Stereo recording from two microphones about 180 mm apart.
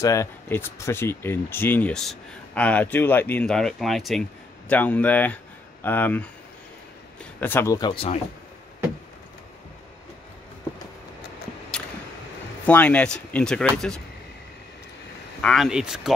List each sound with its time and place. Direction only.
0.0 s speech: 15° left (ahead or behind)
12.6 s speech: 10° left (ahead or behind)
15.4 s speech: centre (ahead or behind)